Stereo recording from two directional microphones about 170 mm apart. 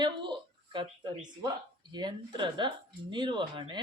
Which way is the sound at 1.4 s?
25° right (ahead or behind).